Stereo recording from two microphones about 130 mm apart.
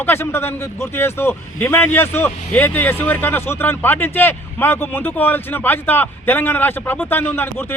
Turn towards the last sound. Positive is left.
turn(degrees=15)  # may be behind; listen again after turning